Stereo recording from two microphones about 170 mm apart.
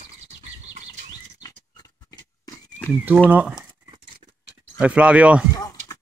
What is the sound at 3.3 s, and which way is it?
Speech, 5° right (ahead or behind).